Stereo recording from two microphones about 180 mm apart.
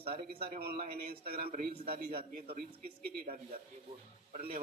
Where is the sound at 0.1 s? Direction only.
60° right (ahead or behind).